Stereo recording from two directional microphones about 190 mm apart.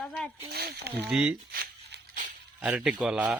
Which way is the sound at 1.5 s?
55° right (ahead or behind).